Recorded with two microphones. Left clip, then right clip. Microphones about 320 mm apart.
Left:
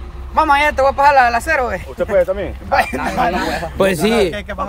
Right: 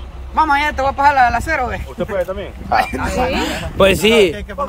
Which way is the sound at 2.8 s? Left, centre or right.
Centre.